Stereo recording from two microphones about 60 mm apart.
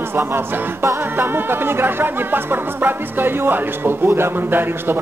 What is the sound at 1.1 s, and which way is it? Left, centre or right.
Music, right.